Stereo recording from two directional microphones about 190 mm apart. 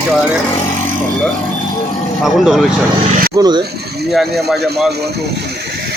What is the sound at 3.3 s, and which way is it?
Speech, 20° right (ahead or behind).